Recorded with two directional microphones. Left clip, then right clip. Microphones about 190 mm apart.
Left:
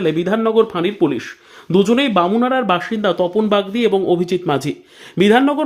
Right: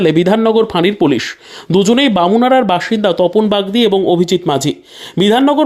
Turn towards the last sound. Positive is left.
turn(degrees=-25)  # may be behind; listen again after turning